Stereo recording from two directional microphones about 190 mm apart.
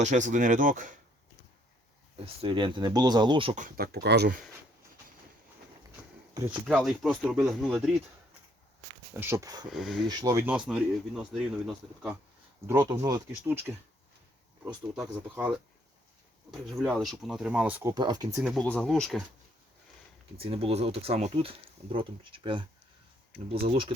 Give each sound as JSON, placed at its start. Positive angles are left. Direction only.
{"t": 0.0, "sound": "speech", "side_deg": -40}
{"t": 2.1, "sound": "speech", "side_deg": -30}
{"t": 3.5, "sound": "speech", "side_deg": -45}
{"t": 6.5, "sound": "speech", "side_deg": 0}
{"t": 9.1, "sound": "speech", "side_deg": -15}
{"t": 9.6, "sound": "speech", "side_deg": 0}
{"t": 10.1, "sound": "speech", "side_deg": -20}
{"t": 12.6, "sound": "speech", "side_deg": -15}
{"t": 16.5, "sound": "speech", "side_deg": 0}
{"t": 17.9, "sound": "speech", "side_deg": -20}
{"t": 18.4, "sound": "speech", "side_deg": 5}
{"t": 20.3, "sound": "speech", "side_deg": -30}